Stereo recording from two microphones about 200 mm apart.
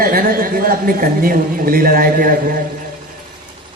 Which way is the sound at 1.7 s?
45° right (ahead or behind).